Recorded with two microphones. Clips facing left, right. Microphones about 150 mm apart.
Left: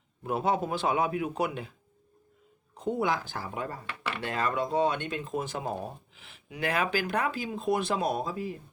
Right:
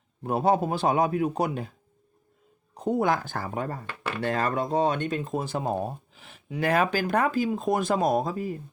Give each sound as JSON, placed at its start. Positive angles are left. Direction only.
{"t": 0.2, "sound": "a man's voice", "side_deg": -40}
{"t": 2.7, "sound": "speech", "side_deg": -40}